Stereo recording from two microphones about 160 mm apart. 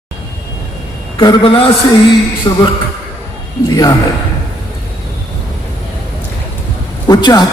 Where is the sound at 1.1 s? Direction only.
30° left (ahead or behind).